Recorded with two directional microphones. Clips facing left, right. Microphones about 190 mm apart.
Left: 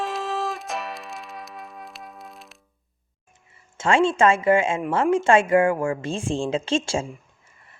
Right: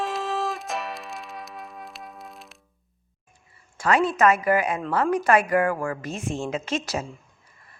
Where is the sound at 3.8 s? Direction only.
25° left (ahead or behind).